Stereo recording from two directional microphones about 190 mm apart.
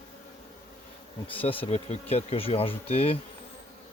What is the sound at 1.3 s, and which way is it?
Bee, 30° left (ahead or behind).